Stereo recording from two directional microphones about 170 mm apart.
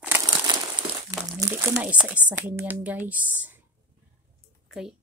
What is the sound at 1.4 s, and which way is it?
Speech, 15° right (ahead or behind).